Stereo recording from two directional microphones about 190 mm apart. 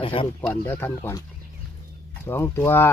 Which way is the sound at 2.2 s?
10° left (ahead or behind).